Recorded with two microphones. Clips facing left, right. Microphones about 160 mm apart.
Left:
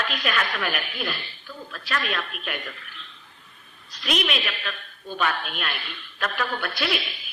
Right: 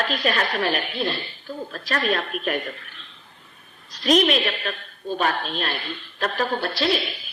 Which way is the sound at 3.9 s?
35° right (ahead or behind).